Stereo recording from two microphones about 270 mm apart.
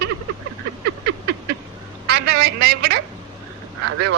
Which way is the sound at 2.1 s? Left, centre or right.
Right.